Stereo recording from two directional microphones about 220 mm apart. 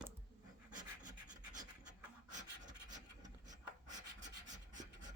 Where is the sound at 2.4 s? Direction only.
35° right (ahead or behind).